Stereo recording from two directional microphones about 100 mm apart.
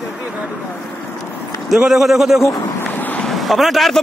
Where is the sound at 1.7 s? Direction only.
5° right (ahead or behind).